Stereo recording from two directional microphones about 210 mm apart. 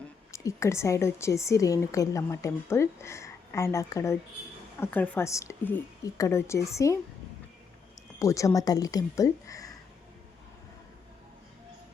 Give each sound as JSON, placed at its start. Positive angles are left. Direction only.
{"t": 0.3, "sound": "a woman's voice", "side_deg": 15}
{"t": 8.2, "sound": "a woman's voice", "side_deg": 15}